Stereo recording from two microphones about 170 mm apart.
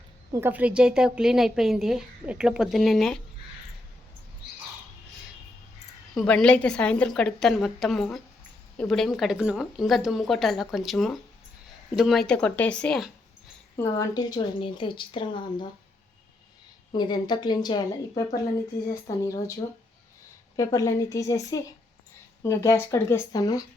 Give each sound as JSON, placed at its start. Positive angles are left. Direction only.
{"t": 0.3, "sound": "a woman's voice", "side_deg": -10}
{"t": 6.1, "sound": "a woman's voice", "side_deg": 5}
{"t": 13.7, "sound": "speech", "side_deg": 20}
{"t": 16.9, "sound": "speech", "side_deg": 25}
{"t": 20.6, "sound": "speech", "side_deg": 20}